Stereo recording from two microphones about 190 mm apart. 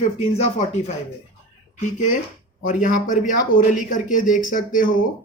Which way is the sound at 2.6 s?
45° left (ahead or behind).